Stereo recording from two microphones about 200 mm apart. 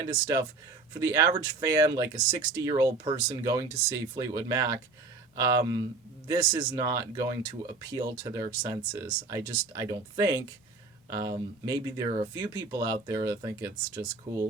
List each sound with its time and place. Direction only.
0.0 s speech: 15° right (ahead or behind)